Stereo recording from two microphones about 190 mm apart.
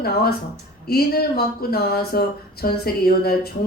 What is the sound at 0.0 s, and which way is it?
Speech, 55° left (ahead or behind).